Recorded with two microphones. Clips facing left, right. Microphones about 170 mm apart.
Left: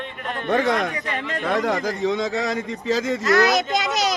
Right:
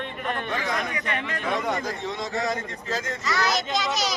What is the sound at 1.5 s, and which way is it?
Speech, 85° left.